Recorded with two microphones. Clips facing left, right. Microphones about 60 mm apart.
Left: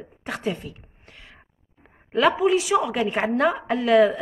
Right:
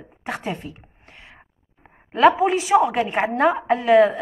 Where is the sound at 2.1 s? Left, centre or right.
Right.